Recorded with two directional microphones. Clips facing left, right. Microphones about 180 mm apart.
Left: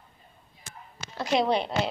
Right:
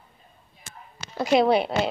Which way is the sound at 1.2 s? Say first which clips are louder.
Right 5 dB; 5° right (ahead or behind).